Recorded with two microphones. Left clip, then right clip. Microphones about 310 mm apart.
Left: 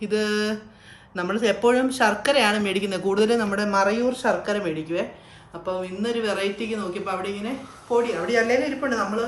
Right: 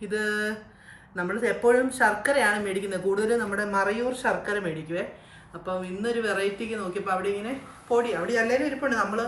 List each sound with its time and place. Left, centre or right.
0.1 s a woman's voice: centre